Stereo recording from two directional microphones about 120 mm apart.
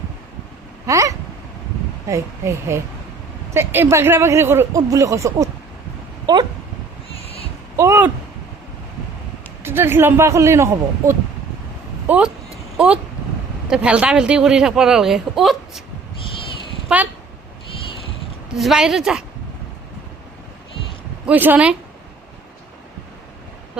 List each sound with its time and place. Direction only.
0.9 s a sound: 25° right (ahead or behind)
2.0 s speech: 25° right (ahead or behind)
7.8 s a sound: 20° right (ahead or behind)
9.6 s speech: 20° right (ahead or behind)
12.0 s speech: 15° right (ahead or behind)
18.5 s speech: 5° right (ahead or behind)
21.2 s speech: 15° right (ahead or behind)